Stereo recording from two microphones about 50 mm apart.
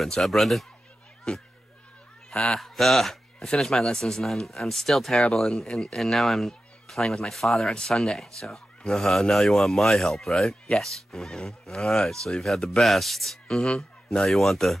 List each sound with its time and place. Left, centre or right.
0.0 s speech: centre
1.3 s speech: centre
2.3 s speech: centre